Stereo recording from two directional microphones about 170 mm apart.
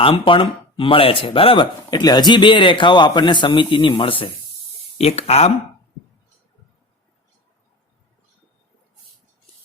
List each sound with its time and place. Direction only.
0.0 s speech: 30° left (ahead or behind)